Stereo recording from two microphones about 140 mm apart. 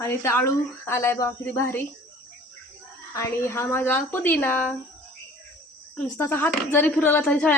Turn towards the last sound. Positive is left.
turn(degrees=10)  # may be behind; listen again after turning